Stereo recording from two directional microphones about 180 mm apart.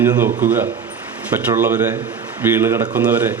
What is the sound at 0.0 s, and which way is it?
Speech, 10° right (ahead or behind).